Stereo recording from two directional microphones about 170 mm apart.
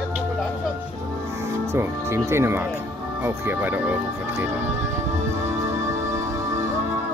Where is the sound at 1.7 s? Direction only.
15° right (ahead or behind).